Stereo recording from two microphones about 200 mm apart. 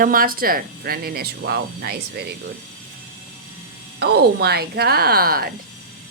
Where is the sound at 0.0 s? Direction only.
45° right (ahead or behind).